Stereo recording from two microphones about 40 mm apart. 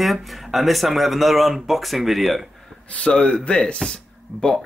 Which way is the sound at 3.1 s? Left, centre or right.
Left.